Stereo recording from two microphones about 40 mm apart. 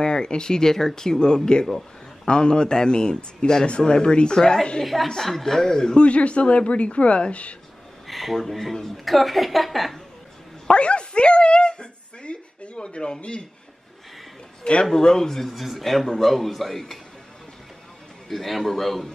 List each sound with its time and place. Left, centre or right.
0.0 s speech: centre
4.4 s a woman's voice: centre
5.9 s a woman's voice: left
8.1 s a sound: centre
8.4 s a woman's voice: centre
10.7 s dog: left
14.6 s speech: left
14.9 s speech: centre
15.5 s a woman's voice: centre
18.3 s a woman's voice: centre